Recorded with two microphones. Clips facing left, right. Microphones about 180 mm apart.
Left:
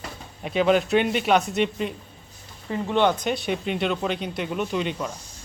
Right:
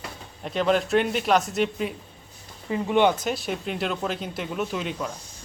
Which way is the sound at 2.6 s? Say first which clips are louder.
Right 1 dB; 10° right (ahead or behind).